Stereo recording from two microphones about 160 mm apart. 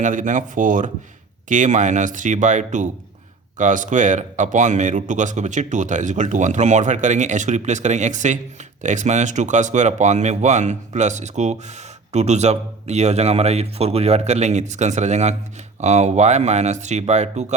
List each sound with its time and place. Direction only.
0.0 s speech: 55° right (ahead or behind)